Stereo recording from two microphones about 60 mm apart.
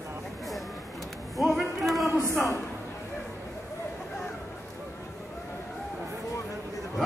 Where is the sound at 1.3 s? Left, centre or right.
Centre.